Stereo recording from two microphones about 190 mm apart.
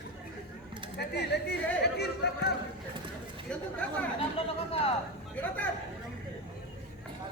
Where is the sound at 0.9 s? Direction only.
60° left (ahead or behind).